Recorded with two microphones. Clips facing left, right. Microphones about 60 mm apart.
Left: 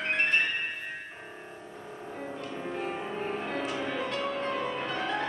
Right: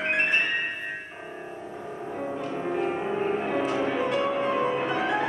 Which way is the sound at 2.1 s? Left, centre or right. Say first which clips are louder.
Right 7 dB; centre.